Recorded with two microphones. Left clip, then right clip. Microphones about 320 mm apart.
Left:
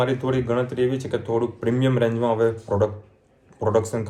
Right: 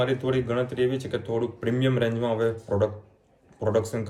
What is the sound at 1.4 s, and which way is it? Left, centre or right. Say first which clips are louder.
Speech: left 3 dB; left.